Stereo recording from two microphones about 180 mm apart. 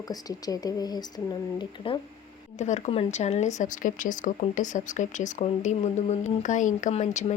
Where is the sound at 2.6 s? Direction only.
40° left (ahead or behind).